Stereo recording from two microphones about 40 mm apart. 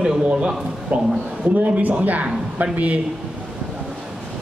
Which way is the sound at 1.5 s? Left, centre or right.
Right.